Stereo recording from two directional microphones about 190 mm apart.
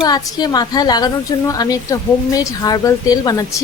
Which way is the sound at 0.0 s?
20° left (ahead or behind).